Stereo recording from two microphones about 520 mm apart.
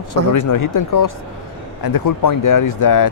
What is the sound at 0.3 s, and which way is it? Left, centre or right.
Speech, left.